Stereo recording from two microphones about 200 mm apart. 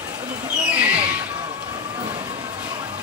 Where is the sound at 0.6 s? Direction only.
5° right (ahead or behind).